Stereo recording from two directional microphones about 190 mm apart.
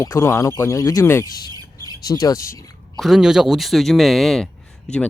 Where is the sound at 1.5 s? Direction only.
20° right (ahead or behind).